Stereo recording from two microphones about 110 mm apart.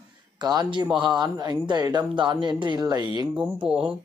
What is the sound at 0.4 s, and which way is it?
Speech, 40° right (ahead or behind).